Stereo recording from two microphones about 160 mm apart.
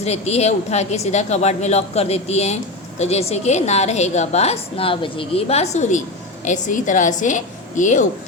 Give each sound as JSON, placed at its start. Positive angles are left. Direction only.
{"t": 0.0, "sound": "a woman's voice", "side_deg": 40}